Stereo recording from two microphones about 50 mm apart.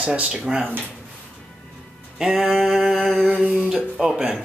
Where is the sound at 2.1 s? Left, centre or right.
Centre.